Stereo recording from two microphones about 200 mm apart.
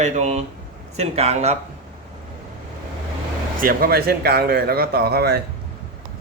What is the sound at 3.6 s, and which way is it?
Speech, 45° right (ahead or behind).